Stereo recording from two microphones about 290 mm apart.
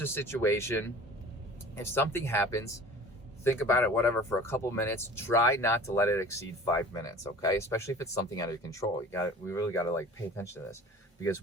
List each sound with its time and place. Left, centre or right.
0.0 s speech: centre